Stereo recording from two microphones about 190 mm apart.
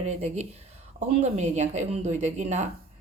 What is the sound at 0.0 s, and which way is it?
Speech, 35° right (ahead or behind).